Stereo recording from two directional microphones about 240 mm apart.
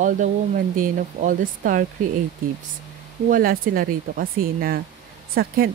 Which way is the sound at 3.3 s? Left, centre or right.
Right.